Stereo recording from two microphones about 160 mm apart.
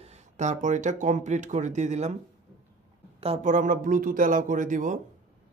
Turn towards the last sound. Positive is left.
turn(degrees=-55)  # may be behind; listen again after turning